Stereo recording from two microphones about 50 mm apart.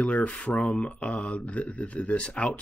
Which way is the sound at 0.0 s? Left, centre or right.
Left.